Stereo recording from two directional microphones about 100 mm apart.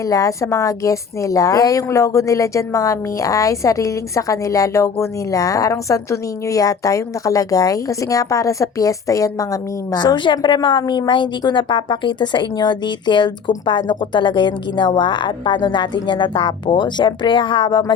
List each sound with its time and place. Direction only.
0.0 s a woman's voice: 30° left (ahead or behind); by 17.9 s 50° left (ahead or behind)